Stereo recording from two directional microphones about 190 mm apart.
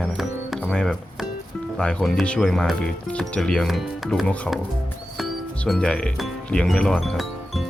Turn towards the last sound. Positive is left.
turn(degrees=0)  # may be behind; listen again after turning